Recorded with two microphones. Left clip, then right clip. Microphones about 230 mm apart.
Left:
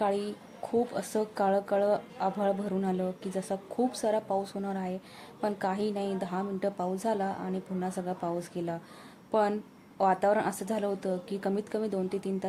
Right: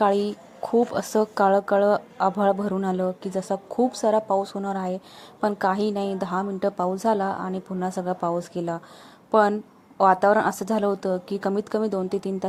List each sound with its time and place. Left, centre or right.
0.0 s speech: right